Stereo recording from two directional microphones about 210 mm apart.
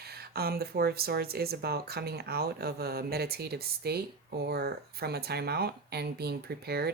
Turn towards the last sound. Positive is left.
turn(degrees=-50)  # may be behind; listen again after turning